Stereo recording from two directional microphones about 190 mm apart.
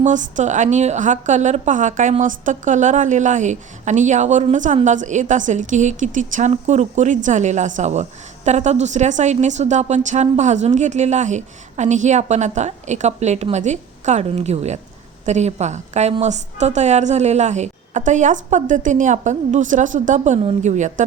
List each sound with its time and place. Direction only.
0.0 s a woman's voice: 40° right (ahead or behind)